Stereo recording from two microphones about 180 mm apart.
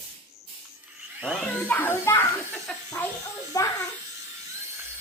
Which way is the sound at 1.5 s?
10° left (ahead or behind).